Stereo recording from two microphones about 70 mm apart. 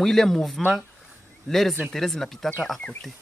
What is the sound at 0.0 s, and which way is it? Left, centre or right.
Speech, centre.